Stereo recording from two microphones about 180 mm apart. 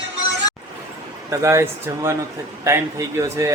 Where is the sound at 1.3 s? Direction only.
15° right (ahead or behind).